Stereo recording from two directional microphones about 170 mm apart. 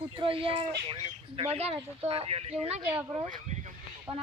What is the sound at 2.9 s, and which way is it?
Speech, 10° right (ahead or behind).